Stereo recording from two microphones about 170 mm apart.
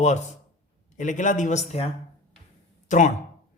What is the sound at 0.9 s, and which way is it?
Speech, 45° left (ahead or behind).